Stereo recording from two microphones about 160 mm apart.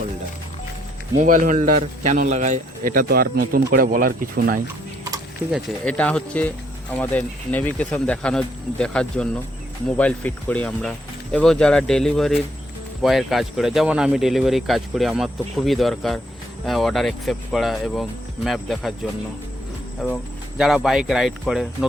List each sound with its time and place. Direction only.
1.2 s a man's voice: 55° right (ahead or behind)
5.5 s speech: centre (ahead or behind)
20.6 s speech: centre (ahead or behind)